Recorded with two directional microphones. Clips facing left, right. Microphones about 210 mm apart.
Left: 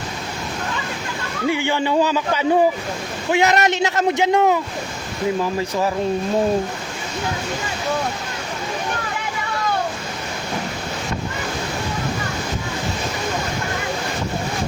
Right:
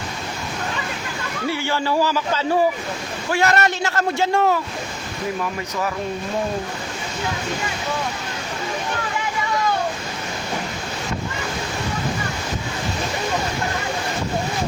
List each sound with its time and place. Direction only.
1.5 s a man's voice: 15° left (ahead or behind)